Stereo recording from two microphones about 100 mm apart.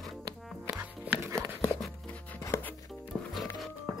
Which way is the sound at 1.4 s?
10° left (ahead or behind).